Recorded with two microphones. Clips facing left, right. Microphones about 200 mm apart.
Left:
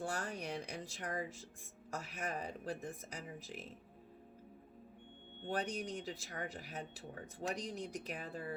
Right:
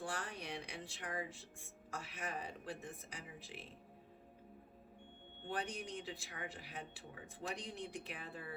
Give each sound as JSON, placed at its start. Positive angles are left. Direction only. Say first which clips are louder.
{"t": 0.0, "sound": "a sound", "louder": "left 4 dB", "side_deg": 40}
{"t": 1.9, "sound": "speech", "louder": "left 3 dB", "side_deg": 40}
{"t": 5.5, "sound": "speech", "louder": "left 4 dB", "side_deg": 40}